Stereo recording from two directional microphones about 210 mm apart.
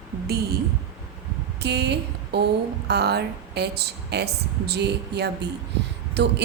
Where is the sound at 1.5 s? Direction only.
50° right (ahead or behind).